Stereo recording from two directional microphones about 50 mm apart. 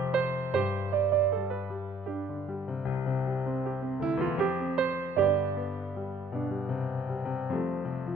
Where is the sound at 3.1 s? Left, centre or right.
Right.